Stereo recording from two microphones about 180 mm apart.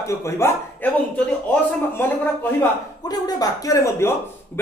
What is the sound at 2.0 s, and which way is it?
Speech, 10° left (ahead or behind).